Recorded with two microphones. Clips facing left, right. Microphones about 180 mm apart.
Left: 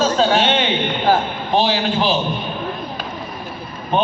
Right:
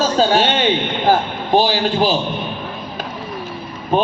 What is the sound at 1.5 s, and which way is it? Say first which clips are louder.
Speech: right 2 dB; 40° right (ahead or behind).